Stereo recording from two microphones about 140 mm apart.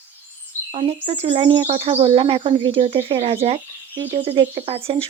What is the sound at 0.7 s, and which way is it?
A woman's voice, 50° right (ahead or behind).